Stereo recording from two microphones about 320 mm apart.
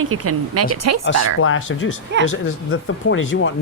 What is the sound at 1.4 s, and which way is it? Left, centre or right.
A man's voice, left.